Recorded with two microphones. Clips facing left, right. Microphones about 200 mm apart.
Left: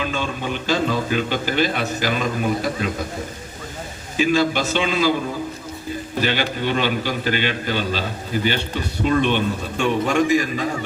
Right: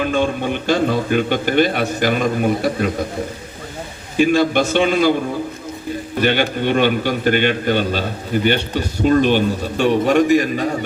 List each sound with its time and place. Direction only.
0.0 s a man's voice: 50° right (ahead or behind)
4.2 s a man's voice: 55° right (ahead or behind)
6.2 s a man's voice: 50° right (ahead or behind)
8.7 s a man's voice: 45° right (ahead or behind)